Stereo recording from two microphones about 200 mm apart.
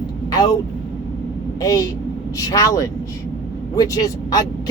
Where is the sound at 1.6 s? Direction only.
15° left (ahead or behind).